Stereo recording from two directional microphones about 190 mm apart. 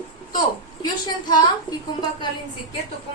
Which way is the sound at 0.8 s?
20° left (ahead or behind).